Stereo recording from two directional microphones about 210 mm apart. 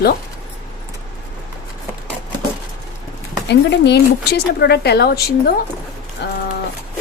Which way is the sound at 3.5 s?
55° left (ahead or behind).